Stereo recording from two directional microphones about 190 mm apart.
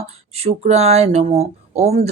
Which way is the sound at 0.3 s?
35° right (ahead or behind).